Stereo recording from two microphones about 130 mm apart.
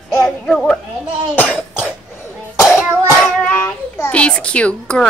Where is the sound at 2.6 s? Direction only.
5° left (ahead or behind).